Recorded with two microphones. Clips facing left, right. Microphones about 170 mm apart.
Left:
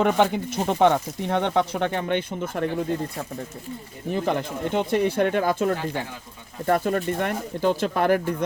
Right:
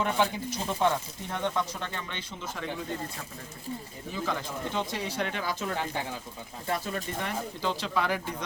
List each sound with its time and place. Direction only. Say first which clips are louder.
0.0 s speech: left 7 dB; 65° left (ahead or behind)
4.1 s speech: left 8 dB; 65° left (ahead or behind)